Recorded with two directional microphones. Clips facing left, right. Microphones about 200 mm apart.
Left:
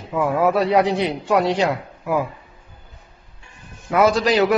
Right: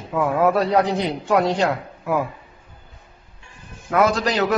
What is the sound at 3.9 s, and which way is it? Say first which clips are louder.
Speech: left 2 dB; 5° left (ahead or behind).